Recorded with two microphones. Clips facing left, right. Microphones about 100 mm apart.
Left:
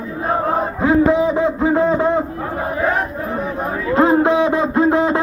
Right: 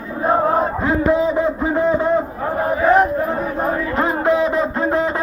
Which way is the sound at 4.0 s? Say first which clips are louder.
Left 5 dB; 20° left (ahead or behind).